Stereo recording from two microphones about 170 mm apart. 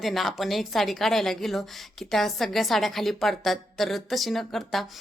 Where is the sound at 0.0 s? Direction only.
Centre (ahead or behind).